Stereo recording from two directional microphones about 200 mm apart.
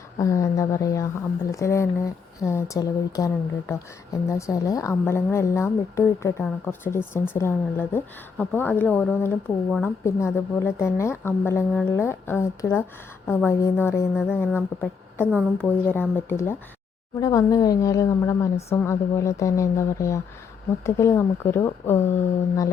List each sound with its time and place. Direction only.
0.2 s a woman's voice: 15° left (ahead or behind)
15.5 s a woman's voice: 10° left (ahead or behind)